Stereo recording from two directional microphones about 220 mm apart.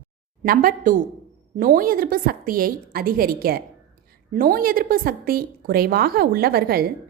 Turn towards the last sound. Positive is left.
turn(degrees=-45)  # may be behind; listen again after turning